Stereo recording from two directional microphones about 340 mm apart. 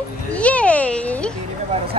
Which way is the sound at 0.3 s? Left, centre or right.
Centre.